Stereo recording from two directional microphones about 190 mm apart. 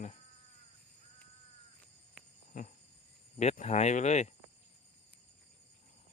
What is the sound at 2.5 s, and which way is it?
Insect, 40° left (ahead or behind).